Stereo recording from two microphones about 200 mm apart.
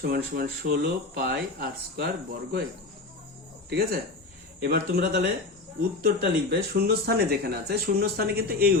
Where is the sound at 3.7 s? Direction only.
50° right (ahead or behind).